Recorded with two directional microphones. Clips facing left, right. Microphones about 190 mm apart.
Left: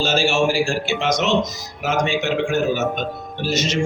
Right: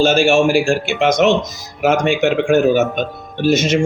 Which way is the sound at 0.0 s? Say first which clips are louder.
Right 6 dB; 55° right (ahead or behind).